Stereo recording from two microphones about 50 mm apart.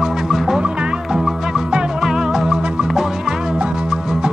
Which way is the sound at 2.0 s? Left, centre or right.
Centre.